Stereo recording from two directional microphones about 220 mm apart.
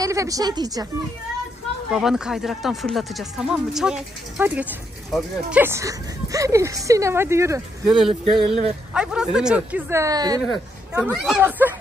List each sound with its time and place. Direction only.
0.0 s speech: 15° right (ahead or behind)
1.9 s speech: centre (ahead or behind)
10.4 s speech: centre (ahead or behind)